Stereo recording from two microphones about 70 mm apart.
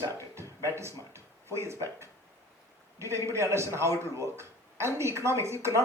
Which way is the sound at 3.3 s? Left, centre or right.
Right.